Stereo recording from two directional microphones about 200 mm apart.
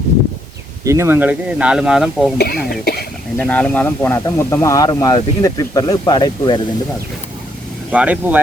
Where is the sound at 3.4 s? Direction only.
5° left (ahead or behind); by 6.5 s 20° left (ahead or behind).